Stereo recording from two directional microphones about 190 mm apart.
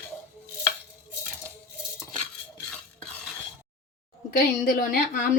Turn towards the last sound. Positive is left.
turn(degrees=50)  # may be behind; listen again after turning